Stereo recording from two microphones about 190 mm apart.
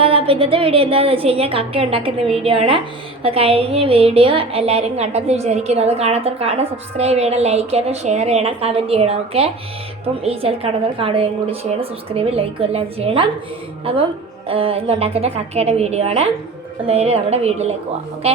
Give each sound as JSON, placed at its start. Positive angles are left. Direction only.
{"t": 0.0, "sound": "a woman's voice", "side_deg": -30}
{"t": 14.4, "sound": "a woman's voice", "side_deg": -30}